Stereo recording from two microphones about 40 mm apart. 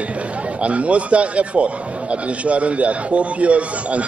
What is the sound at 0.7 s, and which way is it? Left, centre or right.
Speech, right.